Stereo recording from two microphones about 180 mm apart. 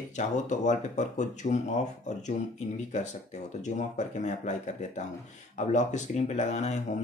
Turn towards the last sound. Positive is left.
turn(degrees=40)  # may be behind; listen again after turning